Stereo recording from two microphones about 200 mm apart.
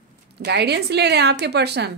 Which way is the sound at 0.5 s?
55° right (ahead or behind).